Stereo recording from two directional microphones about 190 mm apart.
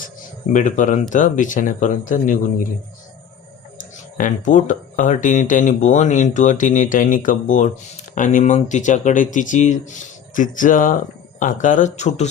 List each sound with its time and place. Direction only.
0.5 s speech: 40° left (ahead or behind)
4.2 s speech: 40° left (ahead or behind)